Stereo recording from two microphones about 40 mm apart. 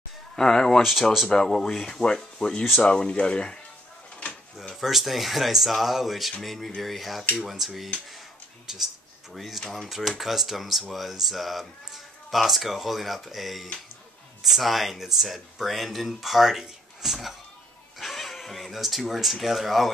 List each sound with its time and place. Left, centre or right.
0.4 s speech: centre
4.7 s speech: centre